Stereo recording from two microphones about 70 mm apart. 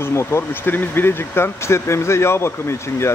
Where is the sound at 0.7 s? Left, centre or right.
Left.